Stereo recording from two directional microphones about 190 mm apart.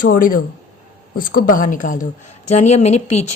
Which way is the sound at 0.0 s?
45° left (ahead or behind).